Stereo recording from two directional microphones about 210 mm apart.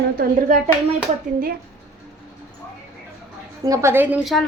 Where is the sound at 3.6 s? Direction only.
15° right (ahead or behind).